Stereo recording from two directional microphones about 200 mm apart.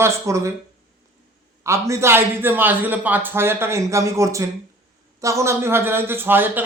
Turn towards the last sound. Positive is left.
turn(degrees=-10)  # may be behind; listen again after turning